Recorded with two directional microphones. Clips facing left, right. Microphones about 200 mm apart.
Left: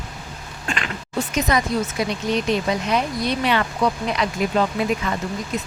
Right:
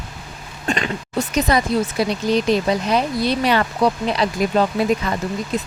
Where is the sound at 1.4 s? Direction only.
35° right (ahead or behind).